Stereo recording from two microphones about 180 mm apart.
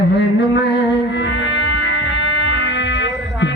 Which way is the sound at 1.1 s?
85° left.